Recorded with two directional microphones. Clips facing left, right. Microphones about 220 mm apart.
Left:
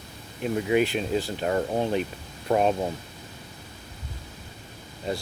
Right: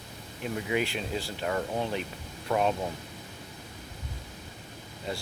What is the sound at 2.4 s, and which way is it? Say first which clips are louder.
Speech: left 5 dB; 35° left (ahead or behind).